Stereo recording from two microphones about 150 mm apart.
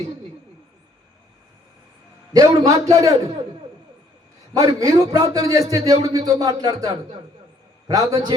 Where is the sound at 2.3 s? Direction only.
25° right (ahead or behind).